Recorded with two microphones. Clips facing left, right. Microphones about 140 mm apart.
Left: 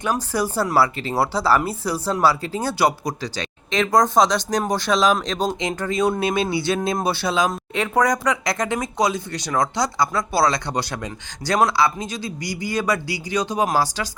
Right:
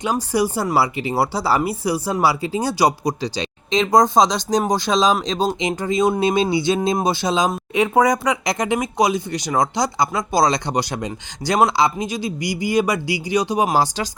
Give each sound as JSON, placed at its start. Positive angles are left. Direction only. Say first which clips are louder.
{"t": 0.0, "sound": "speech", "louder": "right 3 dB", "side_deg": -15}